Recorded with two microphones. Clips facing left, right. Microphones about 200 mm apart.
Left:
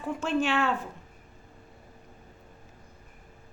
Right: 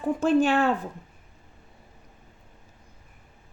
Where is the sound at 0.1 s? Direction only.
35° right (ahead or behind).